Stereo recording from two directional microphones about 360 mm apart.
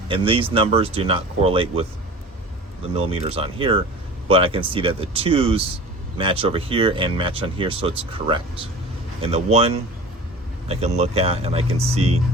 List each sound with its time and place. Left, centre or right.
0.1 s speech: centre
2.9 s speech: centre